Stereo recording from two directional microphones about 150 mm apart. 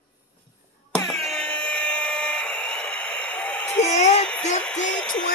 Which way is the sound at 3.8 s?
45° left (ahead or behind).